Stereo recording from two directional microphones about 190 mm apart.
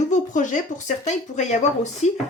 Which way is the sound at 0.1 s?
40° left (ahead or behind).